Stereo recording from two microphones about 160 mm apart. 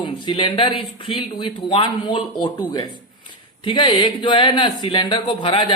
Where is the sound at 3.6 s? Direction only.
30° left (ahead or behind).